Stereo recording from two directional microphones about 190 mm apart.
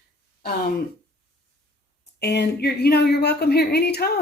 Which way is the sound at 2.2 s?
60° left (ahead or behind).